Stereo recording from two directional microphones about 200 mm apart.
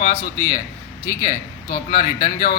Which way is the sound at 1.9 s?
40° left (ahead or behind).